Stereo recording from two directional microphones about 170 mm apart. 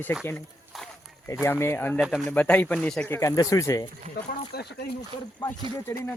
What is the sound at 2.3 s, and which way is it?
Speech, 10° left (ahead or behind).